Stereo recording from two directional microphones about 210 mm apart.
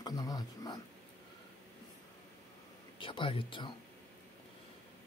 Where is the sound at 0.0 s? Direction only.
15° left (ahead or behind).